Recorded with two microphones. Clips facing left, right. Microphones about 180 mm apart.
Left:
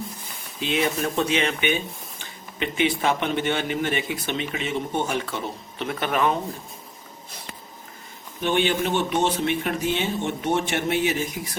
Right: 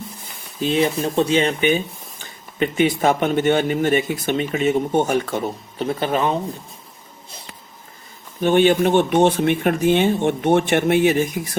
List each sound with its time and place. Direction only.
0.6 s speech: 35° right (ahead or behind)
5.8 s speech: 30° right (ahead or behind)
8.4 s speech: 45° right (ahead or behind)